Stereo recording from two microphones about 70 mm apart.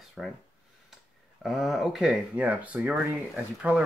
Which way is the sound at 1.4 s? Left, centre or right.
Centre.